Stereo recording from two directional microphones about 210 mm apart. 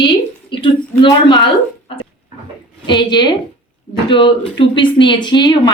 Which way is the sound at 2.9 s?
20° left (ahead or behind).